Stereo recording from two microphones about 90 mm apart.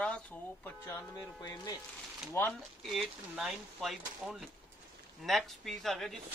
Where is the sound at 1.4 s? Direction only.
40° left (ahead or behind).